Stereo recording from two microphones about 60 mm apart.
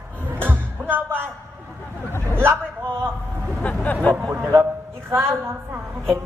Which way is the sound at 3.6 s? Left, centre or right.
Left.